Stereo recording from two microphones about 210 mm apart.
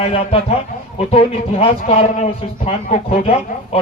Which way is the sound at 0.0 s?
25° left (ahead or behind).